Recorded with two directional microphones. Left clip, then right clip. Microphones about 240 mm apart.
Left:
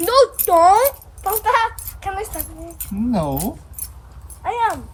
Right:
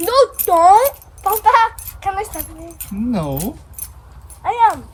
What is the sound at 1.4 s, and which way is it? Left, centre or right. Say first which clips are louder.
Keys jangling: right 5 dB; right.